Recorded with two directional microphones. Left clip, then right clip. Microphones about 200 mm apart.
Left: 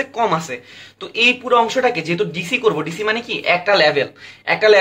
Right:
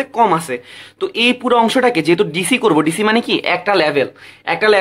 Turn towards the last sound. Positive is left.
turn(degrees=-40)  # may be behind; listen again after turning